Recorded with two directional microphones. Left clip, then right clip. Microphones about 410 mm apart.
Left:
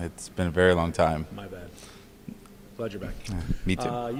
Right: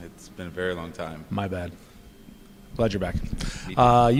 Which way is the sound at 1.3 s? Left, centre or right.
Right.